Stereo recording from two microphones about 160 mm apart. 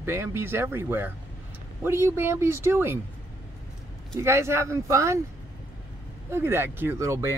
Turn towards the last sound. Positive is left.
turn(degrees=-20)  # may be behind; listen again after turning